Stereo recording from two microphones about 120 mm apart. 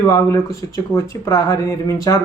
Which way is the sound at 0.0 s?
25° left (ahead or behind).